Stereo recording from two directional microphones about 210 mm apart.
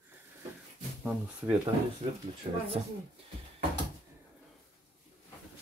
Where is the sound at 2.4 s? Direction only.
30° right (ahead or behind).